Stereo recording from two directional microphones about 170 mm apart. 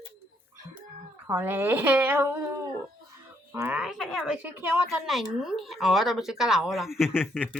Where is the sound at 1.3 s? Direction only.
10° right (ahead or behind).